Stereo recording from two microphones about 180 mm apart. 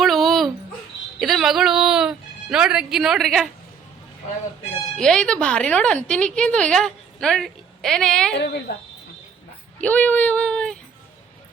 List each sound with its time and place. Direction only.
0.0 s a sound: centre (ahead or behind)
1.2 s speech: centre (ahead or behind)
4.9 s a woman's voice: 5° left (ahead or behind)
8.3 s a woman's voice: 70° left (ahead or behind)
9.8 s speech: 10° left (ahead or behind)